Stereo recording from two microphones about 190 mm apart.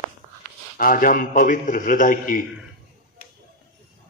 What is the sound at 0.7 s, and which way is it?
A man's voice, 45° left (ahead or behind).